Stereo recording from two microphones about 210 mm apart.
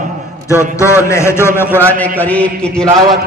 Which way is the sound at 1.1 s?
10° left (ahead or behind).